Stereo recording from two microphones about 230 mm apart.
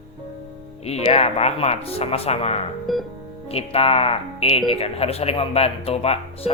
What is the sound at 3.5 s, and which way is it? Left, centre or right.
Speech, left.